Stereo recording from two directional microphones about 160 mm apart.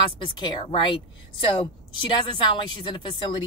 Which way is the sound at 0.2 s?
30° left (ahead or behind).